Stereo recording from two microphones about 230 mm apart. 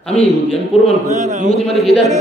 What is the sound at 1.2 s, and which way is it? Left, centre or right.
Speech, right.